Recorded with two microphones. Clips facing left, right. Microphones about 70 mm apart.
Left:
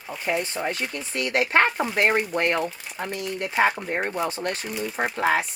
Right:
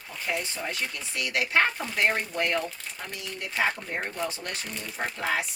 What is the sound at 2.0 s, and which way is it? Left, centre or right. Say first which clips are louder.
Speech: left 4 dB; left.